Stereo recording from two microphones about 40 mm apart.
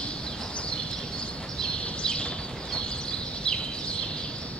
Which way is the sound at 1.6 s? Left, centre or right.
Left.